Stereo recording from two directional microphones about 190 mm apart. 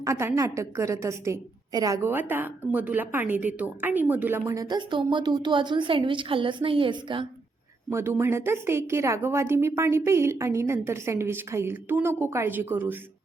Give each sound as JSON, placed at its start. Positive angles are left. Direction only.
{"t": 0.0, "sound": "a woman's voice", "side_deg": -15}
{"t": 7.9, "sound": "a woman's voice", "side_deg": -15}